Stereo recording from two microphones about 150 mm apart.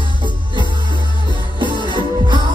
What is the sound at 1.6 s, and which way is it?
Music, 30° right (ahead or behind).